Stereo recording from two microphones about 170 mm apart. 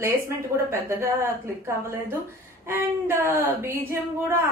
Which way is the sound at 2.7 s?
15° right (ahead or behind).